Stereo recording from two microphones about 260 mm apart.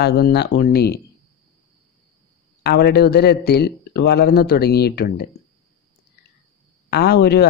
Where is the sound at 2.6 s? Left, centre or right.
Left.